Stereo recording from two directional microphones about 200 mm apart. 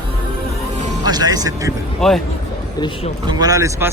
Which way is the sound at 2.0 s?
Centre (ahead or behind).